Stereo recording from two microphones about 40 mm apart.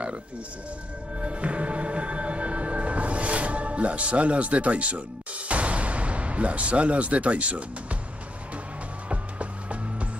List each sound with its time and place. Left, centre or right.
1.2 s music: right
9.1 s music: right